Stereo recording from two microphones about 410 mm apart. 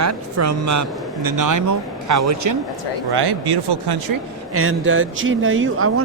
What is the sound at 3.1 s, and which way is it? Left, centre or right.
Speech, right.